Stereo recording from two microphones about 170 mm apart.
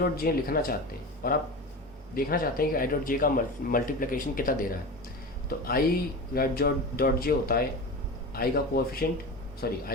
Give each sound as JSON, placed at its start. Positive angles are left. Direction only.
{"t": 0.3, "sound": "speech", "side_deg": 60}